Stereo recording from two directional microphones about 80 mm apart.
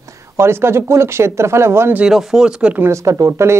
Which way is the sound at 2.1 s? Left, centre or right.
Centre.